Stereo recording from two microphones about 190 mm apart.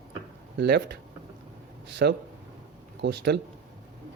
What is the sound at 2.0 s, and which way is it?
Speech, 55° right (ahead or behind).